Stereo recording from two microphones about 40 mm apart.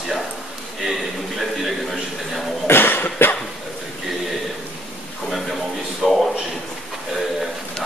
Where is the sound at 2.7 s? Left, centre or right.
Left.